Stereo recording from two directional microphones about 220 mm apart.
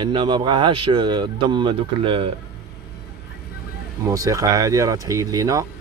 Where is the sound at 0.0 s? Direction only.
20° right (ahead or behind).